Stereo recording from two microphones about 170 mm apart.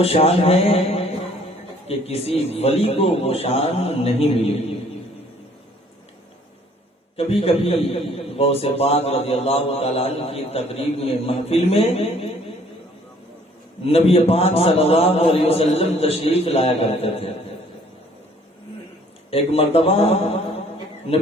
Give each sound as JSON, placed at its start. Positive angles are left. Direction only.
{"t": 0.0, "sound": "a man's voice", "side_deg": 35}
{"t": 7.2, "sound": "a man's voice", "side_deg": 35}
{"t": 13.8, "sound": "a man's voice", "side_deg": 35}
{"t": 19.3, "sound": "a man's voice", "side_deg": 35}